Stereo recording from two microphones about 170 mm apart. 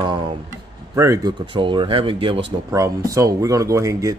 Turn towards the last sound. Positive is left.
turn(degrees=-20)  # may be behind; listen again after turning